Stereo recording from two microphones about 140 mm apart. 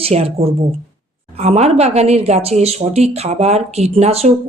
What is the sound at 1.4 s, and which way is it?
Speech, 50° right (ahead or behind).